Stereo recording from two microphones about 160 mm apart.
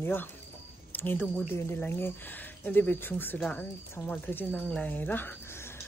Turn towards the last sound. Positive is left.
turn(degrees=10)  # may be behind; listen again after turning